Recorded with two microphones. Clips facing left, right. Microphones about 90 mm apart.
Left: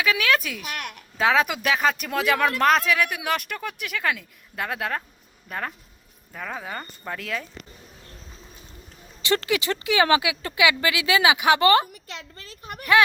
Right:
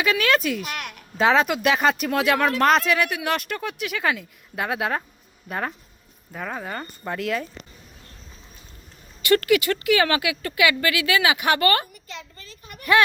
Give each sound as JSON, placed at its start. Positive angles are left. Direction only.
{"t": 0.0, "sound": "speech", "side_deg": 0}
{"t": 9.2, "sound": "speech", "side_deg": 20}